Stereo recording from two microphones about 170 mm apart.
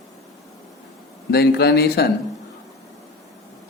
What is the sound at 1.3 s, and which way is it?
Speech, 70° left (ahead or behind).